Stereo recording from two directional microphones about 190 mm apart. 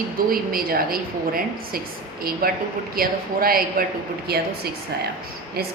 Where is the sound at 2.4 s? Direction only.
55° right (ahead or behind).